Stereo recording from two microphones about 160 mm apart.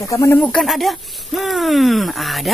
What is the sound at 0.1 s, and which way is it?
Speech, 20° left (ahead or behind).